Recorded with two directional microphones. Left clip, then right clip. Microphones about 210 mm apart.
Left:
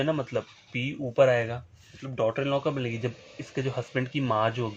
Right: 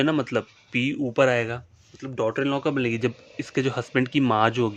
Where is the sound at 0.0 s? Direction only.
45° right (ahead or behind).